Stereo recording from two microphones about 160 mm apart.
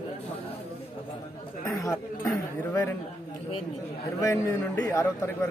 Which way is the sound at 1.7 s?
20° left (ahead or behind).